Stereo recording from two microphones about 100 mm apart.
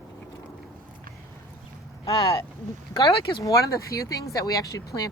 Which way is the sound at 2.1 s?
60° left (ahead or behind).